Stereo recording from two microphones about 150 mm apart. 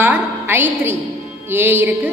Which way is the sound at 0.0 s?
15° right (ahead or behind).